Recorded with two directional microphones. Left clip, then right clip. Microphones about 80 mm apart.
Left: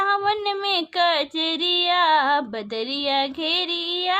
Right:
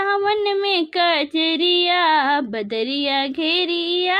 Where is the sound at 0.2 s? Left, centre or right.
Centre.